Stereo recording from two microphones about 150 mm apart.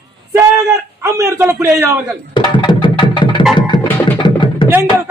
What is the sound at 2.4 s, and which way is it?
Music, 35° left (ahead or behind).